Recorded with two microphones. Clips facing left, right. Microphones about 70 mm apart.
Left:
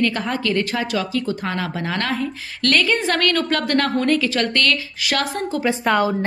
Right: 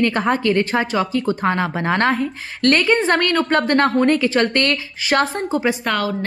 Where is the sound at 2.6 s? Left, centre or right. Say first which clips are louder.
Right 3 dB; right.